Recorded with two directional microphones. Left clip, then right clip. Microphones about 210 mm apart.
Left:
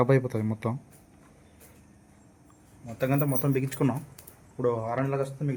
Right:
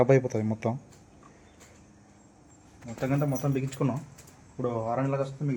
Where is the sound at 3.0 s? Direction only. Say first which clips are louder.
Left 2 dB; 45° left (ahead or behind).